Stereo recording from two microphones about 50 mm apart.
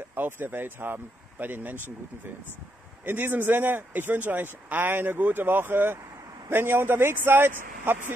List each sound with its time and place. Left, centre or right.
0.1 s speech: right
3.1 s speech: right